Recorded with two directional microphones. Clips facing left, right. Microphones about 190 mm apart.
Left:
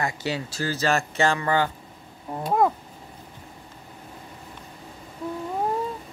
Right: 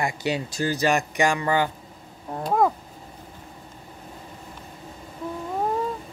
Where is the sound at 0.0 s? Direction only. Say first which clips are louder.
Right 2 dB; 15° right (ahead or behind).